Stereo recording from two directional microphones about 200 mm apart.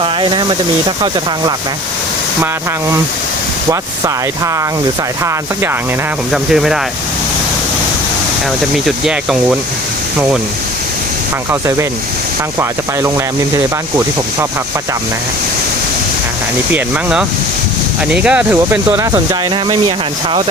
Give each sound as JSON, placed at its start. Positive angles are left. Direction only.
{"t": 0.0, "sound": "speech", "side_deg": -25}
{"t": 6.3, "sound": "speech", "side_deg": 0}
{"t": 8.7, "sound": "speech", "side_deg": -5}
{"t": 16.7, "sound": "speech", "side_deg": -5}